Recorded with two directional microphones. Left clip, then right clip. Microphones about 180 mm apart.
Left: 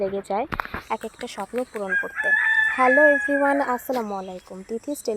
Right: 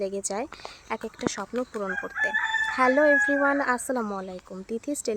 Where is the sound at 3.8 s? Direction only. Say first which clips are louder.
Left 3 dB; 15° right (ahead or behind).